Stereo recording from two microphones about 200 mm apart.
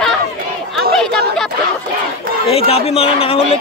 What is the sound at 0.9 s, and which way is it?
Speech, centre (ahead or behind).